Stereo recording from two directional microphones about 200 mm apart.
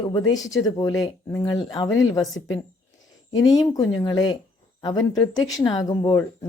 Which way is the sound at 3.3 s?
20° left (ahead or behind).